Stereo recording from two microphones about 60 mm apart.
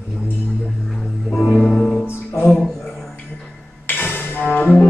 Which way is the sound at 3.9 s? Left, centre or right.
Left.